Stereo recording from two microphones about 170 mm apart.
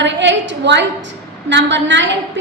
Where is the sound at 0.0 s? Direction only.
90° right.